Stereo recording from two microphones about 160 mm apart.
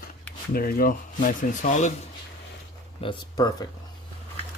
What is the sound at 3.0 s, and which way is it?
Speech, 30° left (ahead or behind).